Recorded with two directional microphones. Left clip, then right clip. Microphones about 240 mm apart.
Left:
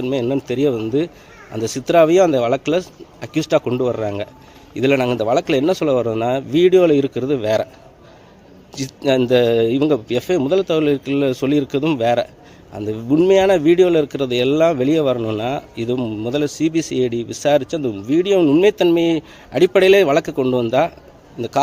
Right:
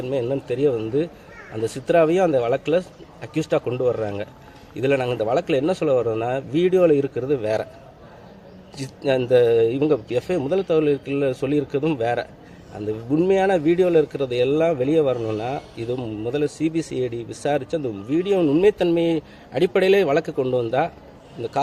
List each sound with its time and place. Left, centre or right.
0.0 s speech: left
8.7 s speech: left